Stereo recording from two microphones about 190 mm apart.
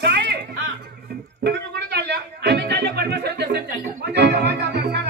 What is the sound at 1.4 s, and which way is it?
Music, 60° right (ahead or behind).